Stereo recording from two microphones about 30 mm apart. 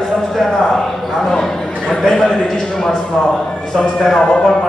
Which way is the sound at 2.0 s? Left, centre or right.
Left.